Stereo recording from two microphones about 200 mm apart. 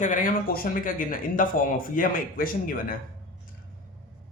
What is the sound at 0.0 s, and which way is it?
Speech, 40° left (ahead or behind).